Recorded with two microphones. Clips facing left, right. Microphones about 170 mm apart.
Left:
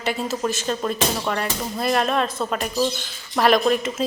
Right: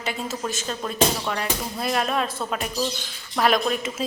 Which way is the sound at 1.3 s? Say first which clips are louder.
Left 2 dB; centre (ahead or behind).